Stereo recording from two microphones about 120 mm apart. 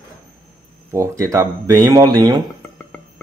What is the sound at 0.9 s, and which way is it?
Speech, 25° right (ahead or behind).